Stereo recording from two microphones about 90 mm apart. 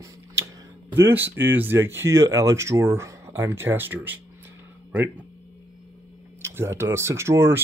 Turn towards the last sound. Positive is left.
turn(degrees=-30)  # may be behind; listen again after turning